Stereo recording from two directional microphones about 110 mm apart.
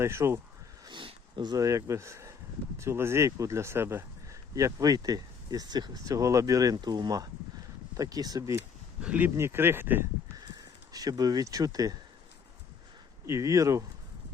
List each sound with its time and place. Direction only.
0.0 s speech: 25° right (ahead or behind)
0.9 s a sound: 45° right (ahead or behind); by 2.3 s 25° right (ahead or behind)
2.7 s speech: 25° right (ahead or behind)
9.0 s speech: 15° right (ahead or behind)
10.3 s a sound: 35° right (ahead or behind)
13.2 s speech: 25° right (ahead or behind)